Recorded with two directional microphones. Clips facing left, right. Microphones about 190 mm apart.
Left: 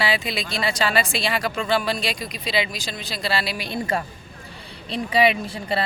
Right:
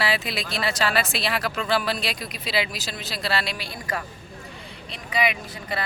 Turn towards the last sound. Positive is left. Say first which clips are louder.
# left 6 dB
turn(degrees=30)  # may be behind; listen again after turning